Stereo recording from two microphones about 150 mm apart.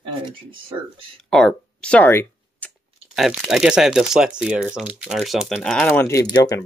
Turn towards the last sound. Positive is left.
turn(degrees=25)  # may be behind; listen again after turning